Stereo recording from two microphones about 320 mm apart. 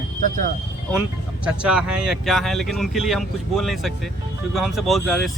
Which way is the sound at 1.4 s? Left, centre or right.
Centre.